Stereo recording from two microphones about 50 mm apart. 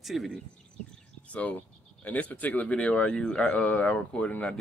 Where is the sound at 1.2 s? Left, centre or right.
Left.